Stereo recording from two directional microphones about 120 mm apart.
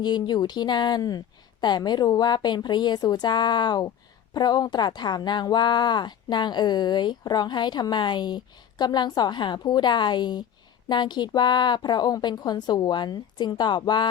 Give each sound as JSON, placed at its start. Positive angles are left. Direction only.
{"t": 0.0, "sound": "speech", "side_deg": 35}